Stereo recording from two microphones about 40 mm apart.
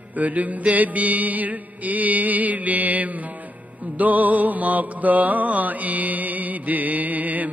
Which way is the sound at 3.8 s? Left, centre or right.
Right.